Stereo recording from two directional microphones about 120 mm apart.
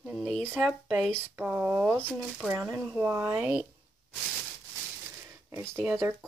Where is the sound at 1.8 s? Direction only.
10° left (ahead or behind).